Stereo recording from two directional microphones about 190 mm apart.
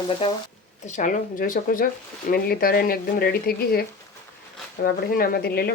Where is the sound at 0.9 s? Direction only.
40° left (ahead or behind).